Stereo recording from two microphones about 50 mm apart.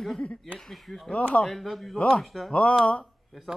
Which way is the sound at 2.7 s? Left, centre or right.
Left.